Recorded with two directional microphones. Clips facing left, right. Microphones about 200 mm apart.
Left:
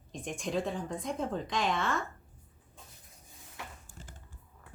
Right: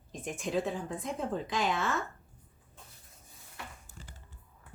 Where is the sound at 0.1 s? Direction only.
5° right (ahead or behind).